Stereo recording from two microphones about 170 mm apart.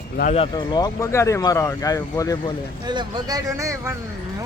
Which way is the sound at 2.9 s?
25° right (ahead or behind).